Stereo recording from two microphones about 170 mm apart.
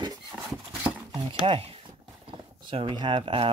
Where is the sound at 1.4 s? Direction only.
35° right (ahead or behind).